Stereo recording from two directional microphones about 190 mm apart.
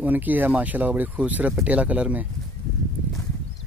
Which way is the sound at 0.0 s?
10° right (ahead or behind).